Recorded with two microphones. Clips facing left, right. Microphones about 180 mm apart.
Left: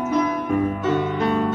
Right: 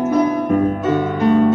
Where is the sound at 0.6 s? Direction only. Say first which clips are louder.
Right 4 dB; 50° right (ahead or behind).